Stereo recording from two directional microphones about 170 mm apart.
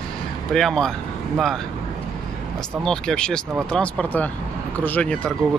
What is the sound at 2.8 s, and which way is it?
Speech, 5° left (ahead or behind).